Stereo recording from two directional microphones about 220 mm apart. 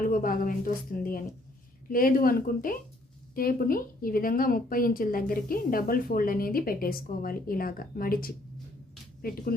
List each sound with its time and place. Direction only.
0.0 s a woman's voice: 40° left (ahead or behind)